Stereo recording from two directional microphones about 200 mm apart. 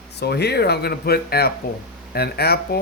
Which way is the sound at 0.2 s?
55° left (ahead or behind).